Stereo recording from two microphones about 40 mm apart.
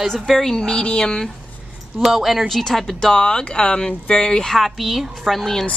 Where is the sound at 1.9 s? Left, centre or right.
Centre.